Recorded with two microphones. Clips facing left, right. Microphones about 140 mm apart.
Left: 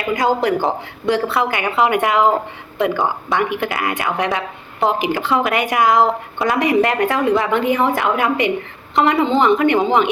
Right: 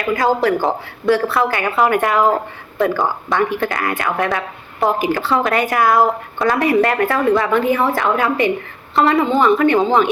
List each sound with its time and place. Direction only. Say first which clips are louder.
0.2 s a woman's voice: even; 20° left (ahead or behind)